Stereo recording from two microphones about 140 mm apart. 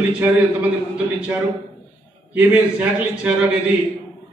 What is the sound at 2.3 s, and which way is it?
A man's voice, 10° right (ahead or behind).